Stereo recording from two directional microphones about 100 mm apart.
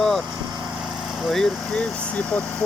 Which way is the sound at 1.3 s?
5° left (ahead or behind).